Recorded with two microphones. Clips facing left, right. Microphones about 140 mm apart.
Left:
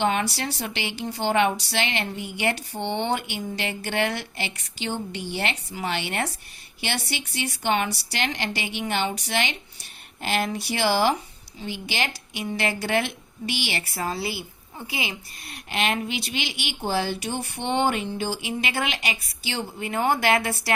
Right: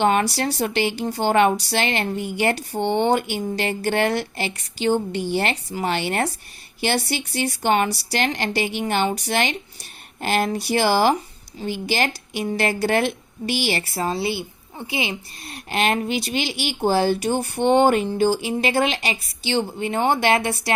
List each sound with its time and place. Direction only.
0.0 s speech: 45° right (ahead or behind); by 15.5 s 25° right (ahead or behind)
15.7 s speech: 40° right (ahead or behind); by 20.7 s 25° right (ahead or behind)